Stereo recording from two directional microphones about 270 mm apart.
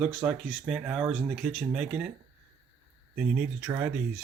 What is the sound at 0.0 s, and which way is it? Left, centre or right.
Speech, centre.